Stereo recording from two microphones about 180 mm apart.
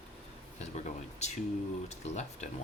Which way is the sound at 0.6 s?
40° left (ahead or behind).